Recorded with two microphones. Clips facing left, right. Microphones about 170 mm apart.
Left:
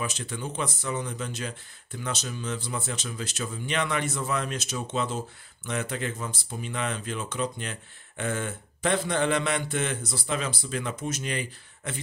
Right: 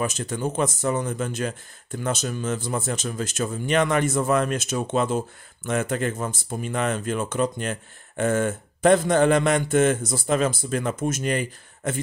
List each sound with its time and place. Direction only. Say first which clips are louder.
0.0 s speech: right 7 dB; 45° right (ahead or behind)